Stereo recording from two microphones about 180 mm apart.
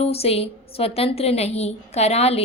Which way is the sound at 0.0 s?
35° left (ahead or behind).